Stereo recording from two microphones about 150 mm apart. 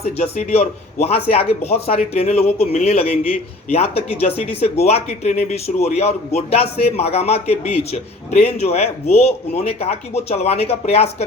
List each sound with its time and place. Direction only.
0.0 s speech: 45° left (ahead or behind)